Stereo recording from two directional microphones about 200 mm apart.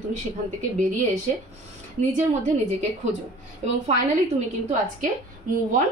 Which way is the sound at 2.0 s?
35° right (ahead or behind).